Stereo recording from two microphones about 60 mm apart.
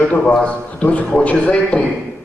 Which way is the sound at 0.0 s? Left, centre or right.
Left.